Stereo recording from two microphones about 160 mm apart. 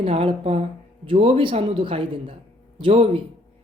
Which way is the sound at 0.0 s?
35° right (ahead or behind).